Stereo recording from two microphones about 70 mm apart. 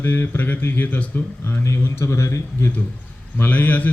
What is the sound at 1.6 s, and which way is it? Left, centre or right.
A man's voice, left.